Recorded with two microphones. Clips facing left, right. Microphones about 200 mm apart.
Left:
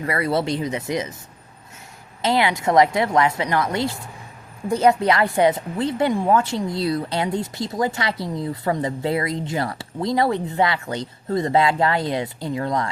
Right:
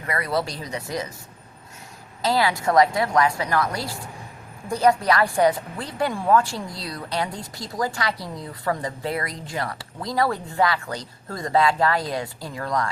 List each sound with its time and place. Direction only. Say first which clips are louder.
0.0 s a woman's voice: left 4 dB; 30° left (ahead or behind)
2.2 s a woman's voice: left 2 dB; 20° left (ahead or behind)